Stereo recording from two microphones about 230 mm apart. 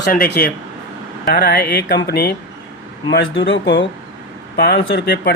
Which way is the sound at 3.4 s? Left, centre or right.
Left.